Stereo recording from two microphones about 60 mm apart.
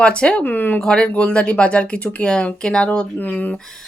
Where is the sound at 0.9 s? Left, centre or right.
Centre.